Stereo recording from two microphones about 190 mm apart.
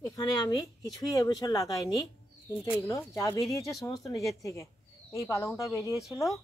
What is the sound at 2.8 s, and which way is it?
Speech, 15° left (ahead or behind).